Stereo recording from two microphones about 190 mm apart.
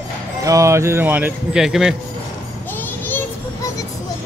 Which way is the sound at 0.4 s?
15° right (ahead or behind).